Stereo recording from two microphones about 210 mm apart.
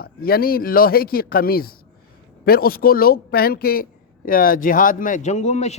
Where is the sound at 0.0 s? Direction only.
45° left (ahead or behind).